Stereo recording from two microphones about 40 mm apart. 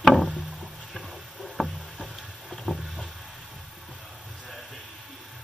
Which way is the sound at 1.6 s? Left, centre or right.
Centre.